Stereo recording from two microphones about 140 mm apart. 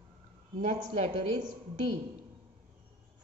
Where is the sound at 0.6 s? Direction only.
60° right (ahead or behind).